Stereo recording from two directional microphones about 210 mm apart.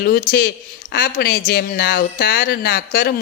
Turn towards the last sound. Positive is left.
turn(degrees=45)  # may be behind; listen again after turning